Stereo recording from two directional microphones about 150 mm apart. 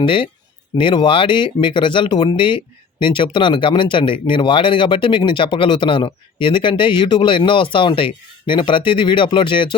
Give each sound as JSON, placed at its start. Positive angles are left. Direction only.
{"t": 0.0, "sound": "speech", "side_deg": 35}